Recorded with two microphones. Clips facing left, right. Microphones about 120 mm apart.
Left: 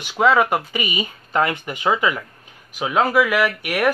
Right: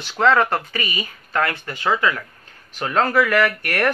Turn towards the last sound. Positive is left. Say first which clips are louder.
# left 1 dB
turn(degrees=10)  # may be behind; listen again after turning